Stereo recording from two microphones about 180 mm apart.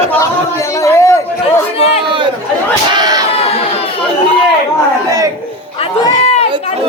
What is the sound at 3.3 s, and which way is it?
Crowd, 35° left (ahead or behind).